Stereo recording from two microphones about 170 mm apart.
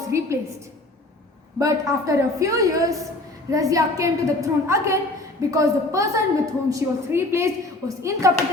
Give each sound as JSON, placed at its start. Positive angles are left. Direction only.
{"t": 0.1, "sound": "a woman's voice", "side_deg": -15}
{"t": 1.5, "sound": "a woman's voice", "side_deg": -20}